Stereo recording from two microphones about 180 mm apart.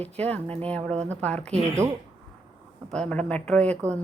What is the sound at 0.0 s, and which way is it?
Speech, 10° left (ahead or behind).